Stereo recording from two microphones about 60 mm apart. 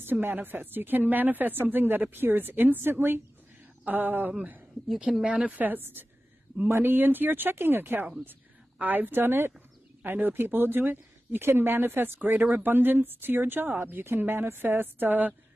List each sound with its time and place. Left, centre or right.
0.0 s speech: right
5.2 s a woman's voice: right